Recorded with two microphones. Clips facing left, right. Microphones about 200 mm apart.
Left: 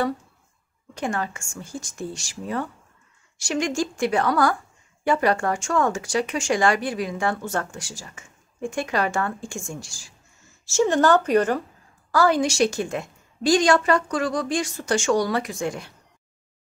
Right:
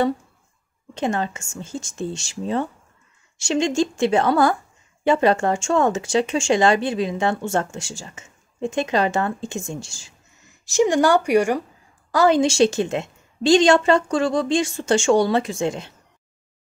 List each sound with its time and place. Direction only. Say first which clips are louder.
0.9 s speech: right 4 dB; 25° right (ahead or behind)